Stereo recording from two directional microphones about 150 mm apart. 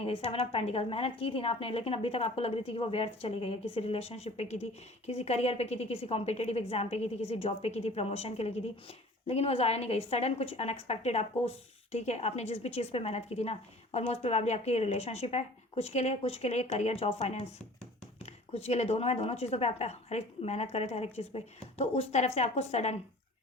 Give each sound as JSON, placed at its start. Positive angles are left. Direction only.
{"t": 0.0, "sound": "a woman's voice", "side_deg": 40}